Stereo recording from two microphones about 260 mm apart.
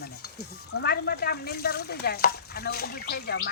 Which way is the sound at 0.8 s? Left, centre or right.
Left.